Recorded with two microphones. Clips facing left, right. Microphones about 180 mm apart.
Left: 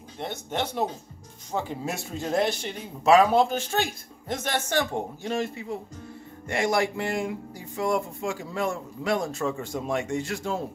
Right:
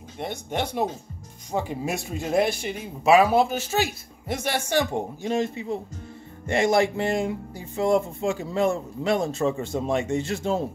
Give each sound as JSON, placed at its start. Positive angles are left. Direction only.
{"t": 0.2, "sound": "speech", "side_deg": -15}